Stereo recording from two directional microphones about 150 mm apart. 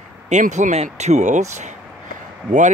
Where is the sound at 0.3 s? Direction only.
50° right (ahead or behind).